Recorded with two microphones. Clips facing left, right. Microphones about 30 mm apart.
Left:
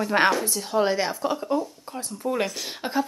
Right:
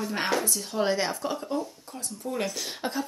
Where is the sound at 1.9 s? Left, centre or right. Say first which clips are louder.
Left 6 dB; left.